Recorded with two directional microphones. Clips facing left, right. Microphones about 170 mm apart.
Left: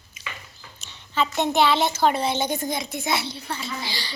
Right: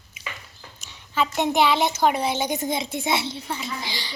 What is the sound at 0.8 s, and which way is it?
A woman's voice, 10° right (ahead or behind).